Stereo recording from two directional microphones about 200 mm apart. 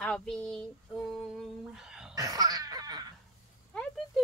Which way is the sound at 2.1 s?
15° right (ahead or behind).